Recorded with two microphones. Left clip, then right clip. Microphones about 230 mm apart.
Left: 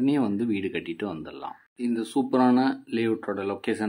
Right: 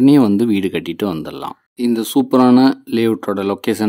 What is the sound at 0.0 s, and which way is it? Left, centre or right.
Speech, right.